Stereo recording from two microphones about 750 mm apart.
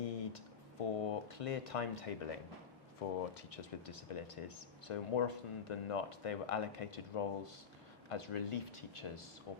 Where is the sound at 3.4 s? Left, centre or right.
Left.